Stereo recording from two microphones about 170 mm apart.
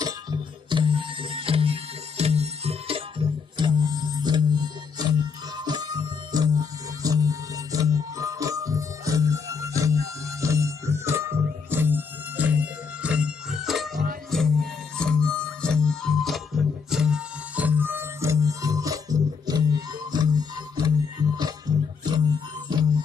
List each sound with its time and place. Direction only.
0.0 s music: 25° right (ahead or behind)